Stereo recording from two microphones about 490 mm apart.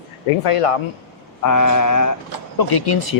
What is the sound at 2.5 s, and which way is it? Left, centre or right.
Speech, left.